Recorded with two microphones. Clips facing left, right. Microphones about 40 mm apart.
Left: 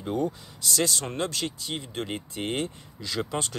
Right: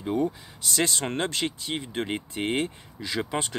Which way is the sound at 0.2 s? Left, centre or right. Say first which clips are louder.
Right 1 dB; right.